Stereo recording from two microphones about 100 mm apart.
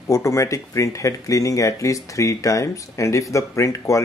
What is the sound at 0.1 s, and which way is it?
Speech, 30° left (ahead or behind).